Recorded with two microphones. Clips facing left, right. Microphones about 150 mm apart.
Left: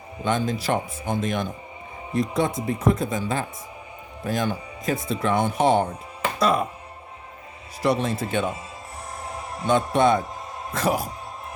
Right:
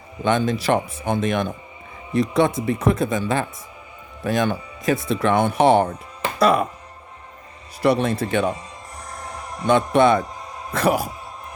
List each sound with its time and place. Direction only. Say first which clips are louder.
0.3 s speech: right 4 dB; 70° right (ahead or behind)
7.8 s speech: right 4 dB; 65° right (ahead or behind)
9.2 s music: even; 5° left (ahead or behind)
9.6 s speech: right 3 dB; 70° right (ahead or behind)